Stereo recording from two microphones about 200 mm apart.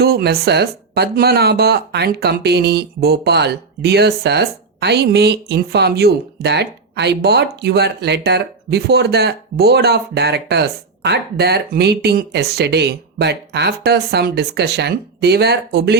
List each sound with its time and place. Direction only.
0.0 s speech: 50° right (ahead or behind)